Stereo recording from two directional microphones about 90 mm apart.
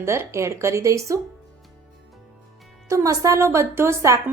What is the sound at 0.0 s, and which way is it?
Speech, 30° right (ahead or behind).